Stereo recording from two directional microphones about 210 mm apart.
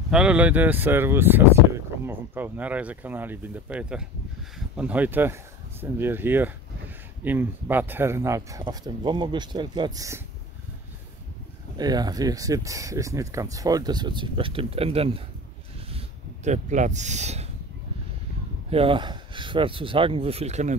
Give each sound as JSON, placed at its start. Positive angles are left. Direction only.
{"t": 0.1, "sound": "speech", "side_deg": -5}
{"t": 11.7, "sound": "speech", "side_deg": -20}
{"t": 16.4, "sound": "speech", "side_deg": -35}
{"t": 18.7, "sound": "speech", "side_deg": -25}